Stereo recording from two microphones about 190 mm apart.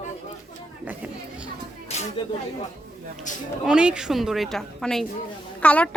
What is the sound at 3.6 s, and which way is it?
A woman's voice, 5° right (ahead or behind).